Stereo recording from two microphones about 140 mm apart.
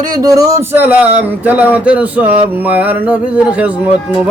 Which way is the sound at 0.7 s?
10° right (ahead or behind).